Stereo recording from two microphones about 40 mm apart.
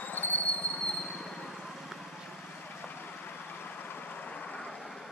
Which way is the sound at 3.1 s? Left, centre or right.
Left.